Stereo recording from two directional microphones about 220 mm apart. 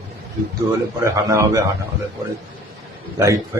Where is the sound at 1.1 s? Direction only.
15° right (ahead or behind).